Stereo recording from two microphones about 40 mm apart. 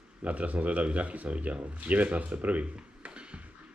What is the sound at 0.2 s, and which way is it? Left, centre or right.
Speech, right.